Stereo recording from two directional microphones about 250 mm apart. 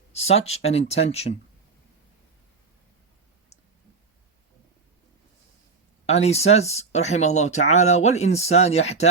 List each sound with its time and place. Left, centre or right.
0.1 s a sound: left
0.4 s speech: left
6.1 s speech: left